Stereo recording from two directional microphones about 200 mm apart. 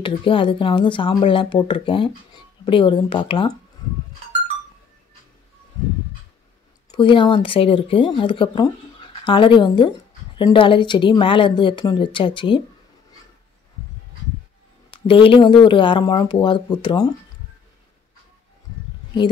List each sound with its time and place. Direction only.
0.0 s speech: 25° left (ahead or behind)
6.9 s speech: 25° left (ahead or behind)
14.9 s speech: 25° left (ahead or behind)